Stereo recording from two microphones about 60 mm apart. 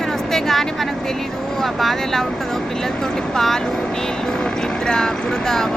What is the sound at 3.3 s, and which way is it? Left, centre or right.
Speech, centre.